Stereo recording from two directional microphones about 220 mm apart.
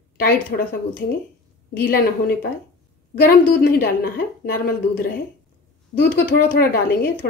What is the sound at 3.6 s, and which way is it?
Speech, 45° left (ahead or behind).